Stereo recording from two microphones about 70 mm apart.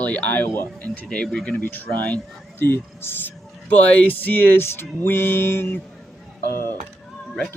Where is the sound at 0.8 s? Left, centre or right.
Centre.